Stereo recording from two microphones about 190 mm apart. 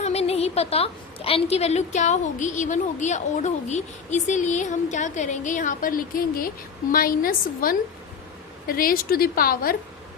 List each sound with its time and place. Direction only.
0.0 s a woman's voice: 35° left (ahead or behind); by 9.7 s 50° left (ahead or behind)